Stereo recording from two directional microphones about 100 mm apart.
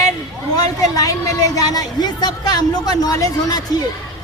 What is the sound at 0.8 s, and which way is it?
A woman's voice, 35° left (ahead or behind).